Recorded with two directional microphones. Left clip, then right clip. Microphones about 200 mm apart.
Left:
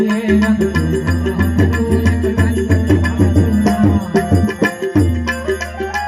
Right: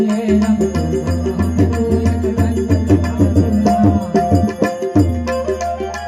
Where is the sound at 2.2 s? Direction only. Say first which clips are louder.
Left 1 dB; 50° right (ahead or behind).